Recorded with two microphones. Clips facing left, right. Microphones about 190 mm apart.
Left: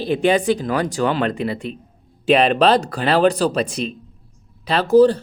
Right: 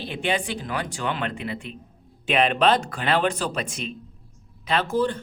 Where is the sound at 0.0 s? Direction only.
40° left (ahead or behind).